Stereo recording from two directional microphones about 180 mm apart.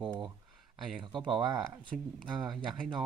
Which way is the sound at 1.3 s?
25° right (ahead or behind).